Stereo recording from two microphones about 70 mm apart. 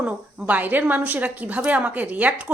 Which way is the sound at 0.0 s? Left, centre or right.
Centre.